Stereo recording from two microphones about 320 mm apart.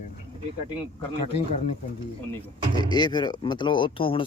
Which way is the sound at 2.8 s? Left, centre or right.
Centre.